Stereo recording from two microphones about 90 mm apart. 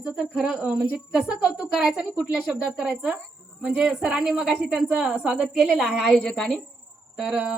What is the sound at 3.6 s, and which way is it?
A woman's voice, 10° right (ahead or behind).